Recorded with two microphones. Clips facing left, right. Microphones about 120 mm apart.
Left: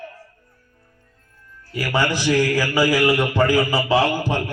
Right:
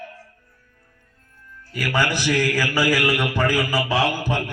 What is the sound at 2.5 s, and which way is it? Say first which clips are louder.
A man's voice: left 2 dB; 15° left (ahead or behind).